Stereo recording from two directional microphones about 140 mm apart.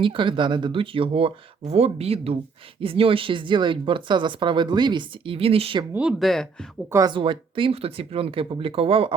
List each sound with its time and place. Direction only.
0.0 s speech: 35° right (ahead or behind)
5.9 s speech: 5° right (ahead or behind)
6.9 s speech: 30° right (ahead or behind)